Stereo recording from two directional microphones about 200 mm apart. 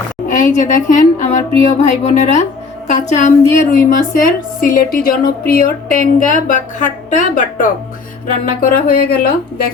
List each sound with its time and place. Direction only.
0.3 s a woman's voice: 40° left (ahead or behind)